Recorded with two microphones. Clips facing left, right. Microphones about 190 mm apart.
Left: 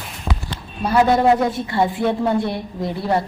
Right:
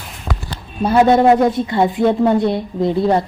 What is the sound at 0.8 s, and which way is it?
A woman's voice, 25° right (ahead or behind).